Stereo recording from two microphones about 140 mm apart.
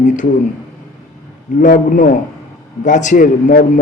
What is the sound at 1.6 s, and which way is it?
A man's voice, 65° left (ahead or behind).